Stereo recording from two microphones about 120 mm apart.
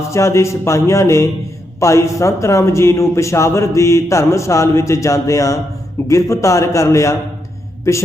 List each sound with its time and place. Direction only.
0.1 s a man's voice: 25° left (ahead or behind)